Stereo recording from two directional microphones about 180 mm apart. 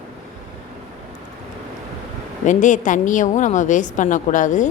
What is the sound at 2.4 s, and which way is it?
A woman's voice, 45° left (ahead or behind).